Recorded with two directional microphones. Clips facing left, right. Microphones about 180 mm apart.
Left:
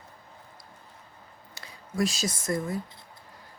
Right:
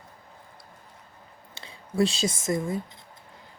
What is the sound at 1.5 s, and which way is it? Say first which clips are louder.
Speech: right 4 dB; 25° right (ahead or behind).